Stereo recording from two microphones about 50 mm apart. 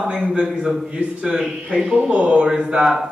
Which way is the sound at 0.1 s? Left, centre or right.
Centre.